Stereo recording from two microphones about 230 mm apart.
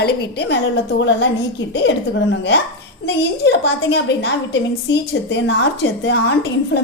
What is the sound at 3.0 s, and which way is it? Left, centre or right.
A woman's voice, left.